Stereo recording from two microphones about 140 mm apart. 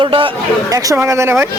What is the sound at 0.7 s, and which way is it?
Speech, 20° right (ahead or behind).